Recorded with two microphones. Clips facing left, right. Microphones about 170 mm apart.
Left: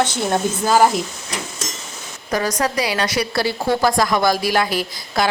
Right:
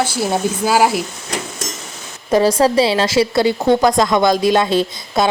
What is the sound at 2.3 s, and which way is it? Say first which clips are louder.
A woman's voice: right 8 dB; 30° right (ahead or behind).